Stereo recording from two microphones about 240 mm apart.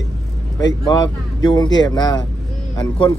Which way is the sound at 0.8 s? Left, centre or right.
Centre.